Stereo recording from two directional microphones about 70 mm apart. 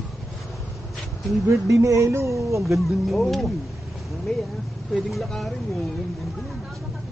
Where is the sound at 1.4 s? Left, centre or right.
Right.